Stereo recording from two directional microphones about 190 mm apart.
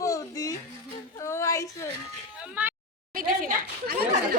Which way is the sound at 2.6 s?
10° right (ahead or behind).